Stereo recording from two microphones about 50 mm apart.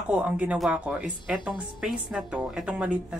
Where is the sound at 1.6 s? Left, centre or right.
Centre.